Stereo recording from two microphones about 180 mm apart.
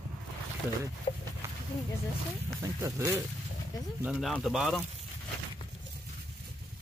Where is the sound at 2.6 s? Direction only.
15° right (ahead or behind).